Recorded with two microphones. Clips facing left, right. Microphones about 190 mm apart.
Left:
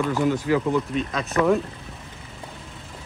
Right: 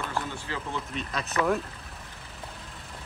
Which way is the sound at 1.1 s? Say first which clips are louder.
Left 6 dB; centre (ahead or behind).